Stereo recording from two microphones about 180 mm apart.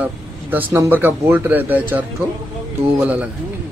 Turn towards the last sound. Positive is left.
turn(degrees=-10)  # may be behind; listen again after turning